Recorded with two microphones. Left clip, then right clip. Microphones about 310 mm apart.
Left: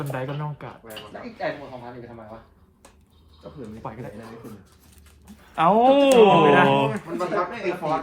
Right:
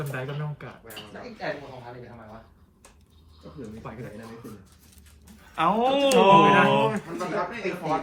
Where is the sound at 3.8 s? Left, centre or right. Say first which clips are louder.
Left 7 dB; left.